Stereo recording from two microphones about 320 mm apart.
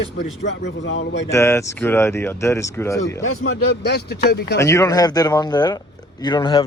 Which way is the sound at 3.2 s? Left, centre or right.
Left.